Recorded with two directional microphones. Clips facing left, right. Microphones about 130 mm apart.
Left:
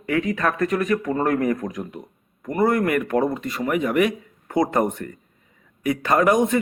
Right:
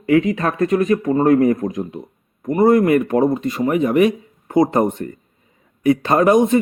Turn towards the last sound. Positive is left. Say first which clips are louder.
# right 4 dB
turn(degrees=-25)  # may be behind; listen again after turning